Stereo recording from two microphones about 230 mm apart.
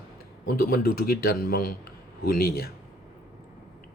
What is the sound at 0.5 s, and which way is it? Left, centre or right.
Speech, left.